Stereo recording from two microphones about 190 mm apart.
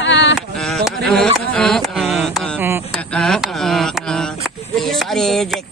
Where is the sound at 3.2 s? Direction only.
Centre (ahead or behind).